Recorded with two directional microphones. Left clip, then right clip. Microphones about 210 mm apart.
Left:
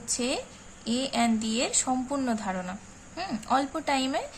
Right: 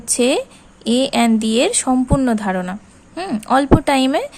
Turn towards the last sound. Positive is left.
turn(degrees=-45)  # may be behind; listen again after turning